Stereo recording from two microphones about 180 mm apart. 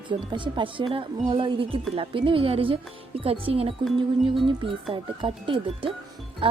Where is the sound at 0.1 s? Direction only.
25° right (ahead or behind).